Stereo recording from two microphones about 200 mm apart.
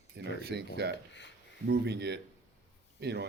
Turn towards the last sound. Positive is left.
turn(degrees=-55)  # may be behind; listen again after turning